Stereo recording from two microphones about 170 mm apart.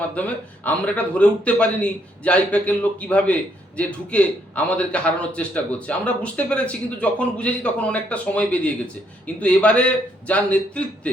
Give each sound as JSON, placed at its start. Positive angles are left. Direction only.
{"t": 0.1, "sound": "a man's voice", "side_deg": 10}